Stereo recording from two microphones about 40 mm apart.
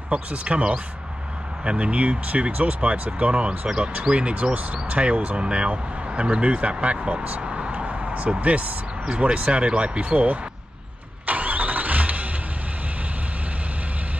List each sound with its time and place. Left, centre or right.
0.1 s speech: right
3.6 s speech: right
7.4 s vehicle: right
9.1 s speech: right
11.2 s vehicle: right